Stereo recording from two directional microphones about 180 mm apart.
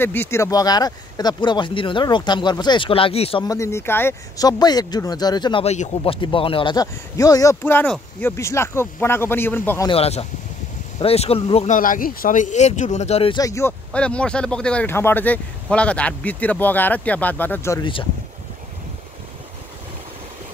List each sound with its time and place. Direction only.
0.0 s speech: 10° left (ahead or behind); by 3.4 s 30° left (ahead or behind)
3.4 s speech: 15° left (ahead or behind)
9.8 s speech: 35° left (ahead or behind)
13.4 s speech: 15° left (ahead or behind)